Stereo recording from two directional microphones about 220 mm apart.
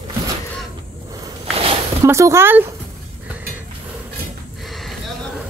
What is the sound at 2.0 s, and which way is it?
Speech, 15° right (ahead or behind).